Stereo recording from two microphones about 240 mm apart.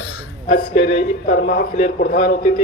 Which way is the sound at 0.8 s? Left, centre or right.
Left.